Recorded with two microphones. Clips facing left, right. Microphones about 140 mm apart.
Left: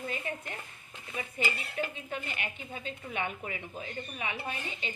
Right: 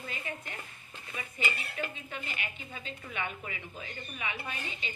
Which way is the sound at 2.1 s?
50° left (ahead or behind).